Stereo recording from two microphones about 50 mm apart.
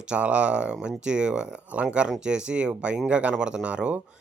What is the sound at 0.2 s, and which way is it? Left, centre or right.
Speech, right.